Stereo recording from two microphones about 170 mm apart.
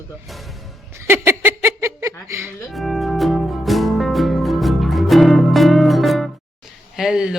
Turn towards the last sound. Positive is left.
turn(degrees=-5)  # may be behind; listen again after turning